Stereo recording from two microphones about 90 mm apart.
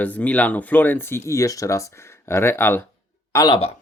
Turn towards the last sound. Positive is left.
turn(degrees=65)  # may be behind; listen again after turning